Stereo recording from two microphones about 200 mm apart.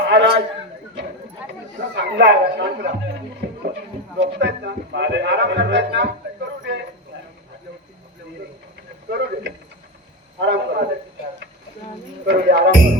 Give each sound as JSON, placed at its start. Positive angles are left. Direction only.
{"t": 0.0, "sound": "speech", "side_deg": -60}
{"t": 1.8, "sound": "speech", "side_deg": -60}
{"t": 4.2, "sound": "speech", "side_deg": -60}
{"t": 9.0, "sound": "speech", "side_deg": -60}
{"t": 12.2, "sound": "speech", "side_deg": -60}